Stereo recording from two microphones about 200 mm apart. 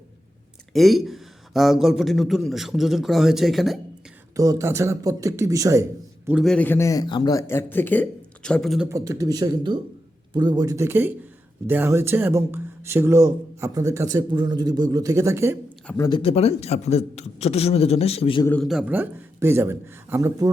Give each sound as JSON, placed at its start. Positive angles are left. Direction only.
{"t": 0.7, "sound": "a man's voice", "side_deg": 0}
{"t": 4.4, "sound": "speech", "side_deg": -15}
{"t": 6.2, "sound": "a man's voice", "side_deg": 0}
{"t": 8.9, "sound": "speech", "side_deg": -15}
{"t": 16.0, "sound": "a man's voice", "side_deg": 25}
{"t": 18.4, "sound": "speech", "side_deg": 5}